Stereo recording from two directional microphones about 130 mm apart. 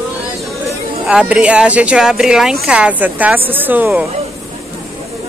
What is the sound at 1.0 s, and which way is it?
A woman's voice, 10° right (ahead or behind).